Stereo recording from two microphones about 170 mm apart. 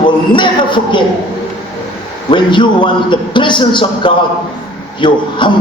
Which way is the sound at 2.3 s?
30° left (ahead or behind).